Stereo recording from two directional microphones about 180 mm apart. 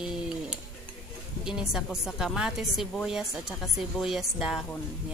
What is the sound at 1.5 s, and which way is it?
A woman's voice, 5° right (ahead or behind).